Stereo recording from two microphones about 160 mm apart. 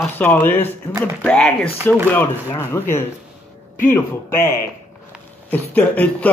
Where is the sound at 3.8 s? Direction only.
15° left (ahead or behind).